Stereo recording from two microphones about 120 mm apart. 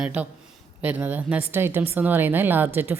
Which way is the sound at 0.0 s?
10° right (ahead or behind).